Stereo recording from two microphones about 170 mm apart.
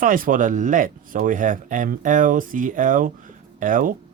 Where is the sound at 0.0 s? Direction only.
55° right (ahead or behind).